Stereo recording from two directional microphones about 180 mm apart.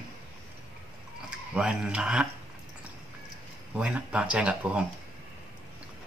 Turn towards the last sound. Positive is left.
turn(degrees=-5)  # may be behind; listen again after turning